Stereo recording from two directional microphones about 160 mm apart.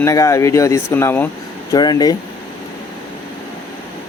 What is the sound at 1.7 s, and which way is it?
Speech, 25° left (ahead or behind).